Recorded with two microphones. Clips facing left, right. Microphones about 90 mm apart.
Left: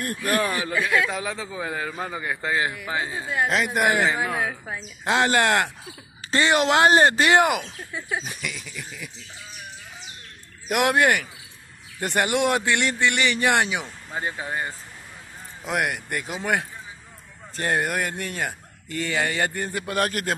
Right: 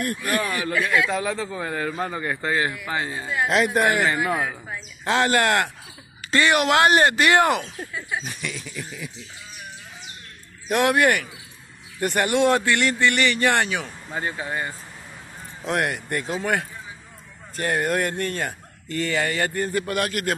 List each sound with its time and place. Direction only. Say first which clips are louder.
0.2 s speech: left 1 dB; 30° left (ahead or behind)
0.8 s a man's voice: right 2 dB; 5° left (ahead or behind)
3.8 s speech: even; 20° left (ahead or behind)
4.2 s a man's voice: right 2 dB; centre (ahead or behind)
4.6 s speech: even; 20° left (ahead or behind)
7.6 s a man's voice: right 2 dB; centre (ahead or behind)
8.6 s a man's voice: right 3 dB; 5° right (ahead or behind)
10.7 s speech: right 1 dB; 20° left (ahead or behind)
15.6 s speech: right 1 dB; 5° left (ahead or behind); by 17.8 s 25° left (ahead or behind)
17.8 s speech: right 4 dB; 10° left (ahead or behind)
20.0 s a man's voice: left 1 dB; 35° left (ahead or behind)